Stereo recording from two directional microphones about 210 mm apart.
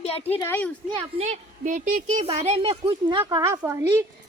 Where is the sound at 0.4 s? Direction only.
10° left (ahead or behind).